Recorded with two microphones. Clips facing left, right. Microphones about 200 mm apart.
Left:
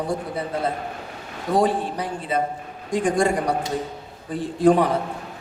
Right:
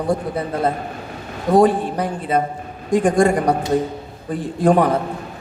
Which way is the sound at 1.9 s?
50° right (ahead or behind).